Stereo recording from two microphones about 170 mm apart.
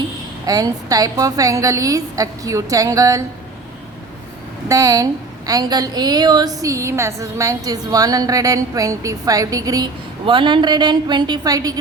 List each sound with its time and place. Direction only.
0.4 s a woman's voice: 20° right (ahead or behind)
4.7 s a woman's voice: 20° right (ahead or behind)